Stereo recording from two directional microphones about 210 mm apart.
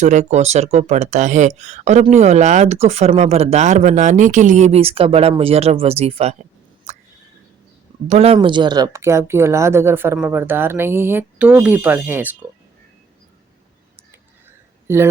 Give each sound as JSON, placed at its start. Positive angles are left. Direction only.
{"t": 0.0, "sound": "speech", "side_deg": -35}
{"t": 8.0, "sound": "speech", "side_deg": -30}
{"t": 14.8, "sound": "speech", "side_deg": -10}